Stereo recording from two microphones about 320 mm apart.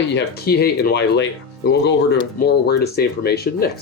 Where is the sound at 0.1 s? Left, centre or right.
Left.